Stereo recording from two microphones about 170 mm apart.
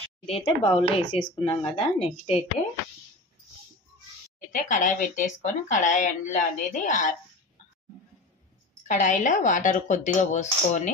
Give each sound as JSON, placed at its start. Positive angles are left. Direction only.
{"t": 0.3, "sound": "speech", "side_deg": 35}
{"t": 4.5, "sound": "speech", "side_deg": 50}
{"t": 8.8, "sound": "speech", "side_deg": 45}